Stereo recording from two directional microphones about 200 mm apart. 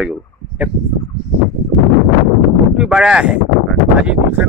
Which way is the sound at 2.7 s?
5° right (ahead or behind).